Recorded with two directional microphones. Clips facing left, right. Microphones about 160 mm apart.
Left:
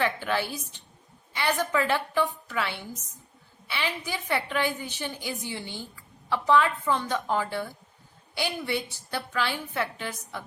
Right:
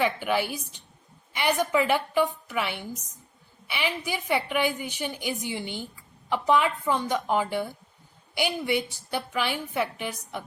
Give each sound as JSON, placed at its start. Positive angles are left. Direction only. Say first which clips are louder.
{"t": 0.0, "sound": "a woman's voice", "louder": "right 2 dB", "side_deg": -15}